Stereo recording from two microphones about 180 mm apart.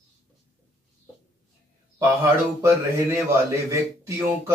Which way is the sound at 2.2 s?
15° right (ahead or behind).